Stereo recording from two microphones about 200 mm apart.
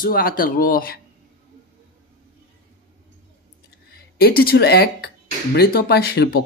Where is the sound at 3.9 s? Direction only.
50° left (ahead or behind).